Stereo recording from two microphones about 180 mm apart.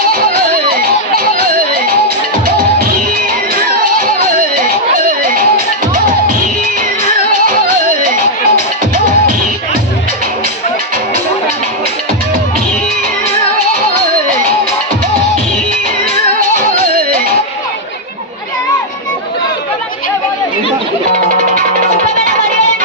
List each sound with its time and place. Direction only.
0.8 s a sound: 55° right (ahead or behind)
2.6 s music: 55° right (ahead or behind)
5.2 s music: 50° right (ahead or behind)
8.0 s music: 50° right (ahead or behind)
16.6 s music: 55° right (ahead or behind)
22.0 s music: 50° right (ahead or behind)